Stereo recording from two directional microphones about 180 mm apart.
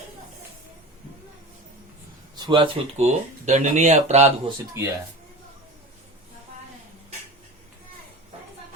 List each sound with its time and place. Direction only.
2.3 s speech: 25° right (ahead or behind)
4.8 s speech: 15° right (ahead or behind)